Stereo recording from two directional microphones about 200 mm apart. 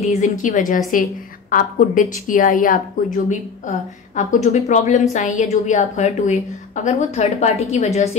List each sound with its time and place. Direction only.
0.0 s a woman's voice: 35° left (ahead or behind)